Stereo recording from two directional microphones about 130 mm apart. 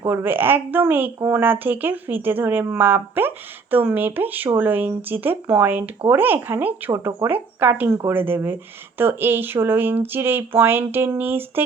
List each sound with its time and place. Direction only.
0.0 s speech: 20° right (ahead or behind)